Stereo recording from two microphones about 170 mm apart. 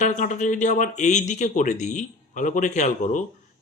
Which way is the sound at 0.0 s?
45° left (ahead or behind).